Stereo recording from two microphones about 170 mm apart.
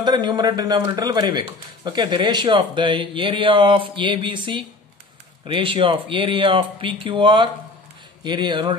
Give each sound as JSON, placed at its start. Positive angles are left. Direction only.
{"t": 0.0, "sound": "speech", "side_deg": -25}